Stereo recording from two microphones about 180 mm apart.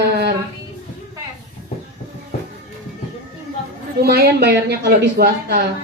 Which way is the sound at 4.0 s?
65° right (ahead or behind).